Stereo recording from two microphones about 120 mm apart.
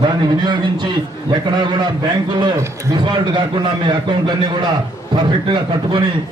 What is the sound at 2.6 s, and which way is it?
A man's voice, 35° right (ahead or behind).